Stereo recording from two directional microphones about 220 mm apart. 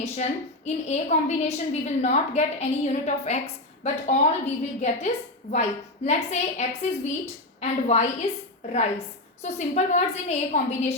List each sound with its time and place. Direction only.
0.0 s a woman's voice: 30° left (ahead or behind)
9.4 s a woman's voice: 30° left (ahead or behind)